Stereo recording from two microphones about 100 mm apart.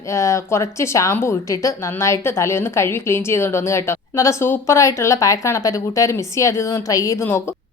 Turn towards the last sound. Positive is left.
turn(degrees=30)  # may be behind; listen again after turning